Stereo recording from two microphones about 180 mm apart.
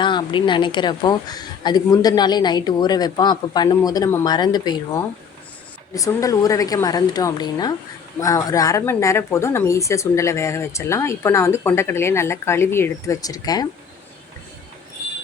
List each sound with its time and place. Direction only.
0.0 s a woman's voice: 25° left (ahead or behind)